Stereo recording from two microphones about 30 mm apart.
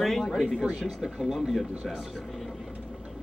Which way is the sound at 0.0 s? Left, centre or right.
Centre.